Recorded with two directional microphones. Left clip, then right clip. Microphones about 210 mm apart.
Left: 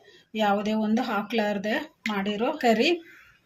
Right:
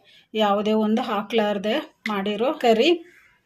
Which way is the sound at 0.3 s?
30° right (ahead or behind).